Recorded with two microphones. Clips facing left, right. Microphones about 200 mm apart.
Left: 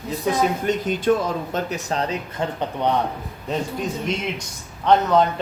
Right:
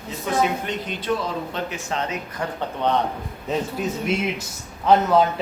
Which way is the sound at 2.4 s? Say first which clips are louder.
Left 1 dB; 20° left (ahead or behind).